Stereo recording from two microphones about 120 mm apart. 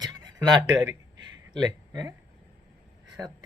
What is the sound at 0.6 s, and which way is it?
Speech, 20° right (ahead or behind).